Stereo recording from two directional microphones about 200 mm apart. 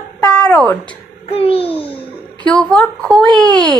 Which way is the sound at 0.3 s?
5° left (ahead or behind).